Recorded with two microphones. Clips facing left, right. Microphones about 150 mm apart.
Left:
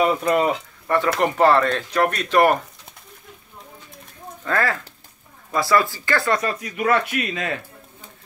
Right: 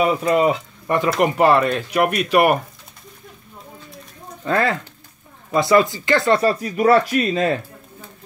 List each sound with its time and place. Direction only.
0.0 s speech: 10° right (ahead or behind)
0.8 s speech: 20° right (ahead or behind)
4.5 s speech: 20° right (ahead or behind)
6.4 s speech: 35° right (ahead or behind)